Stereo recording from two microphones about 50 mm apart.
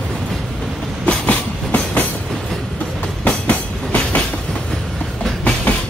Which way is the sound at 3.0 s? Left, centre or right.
Left.